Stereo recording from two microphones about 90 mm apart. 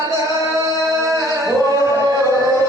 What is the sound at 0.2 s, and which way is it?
Music, 40° right (ahead or behind).